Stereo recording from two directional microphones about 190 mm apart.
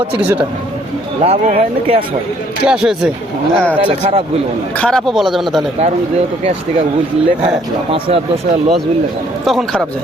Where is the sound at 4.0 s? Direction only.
30° right (ahead or behind).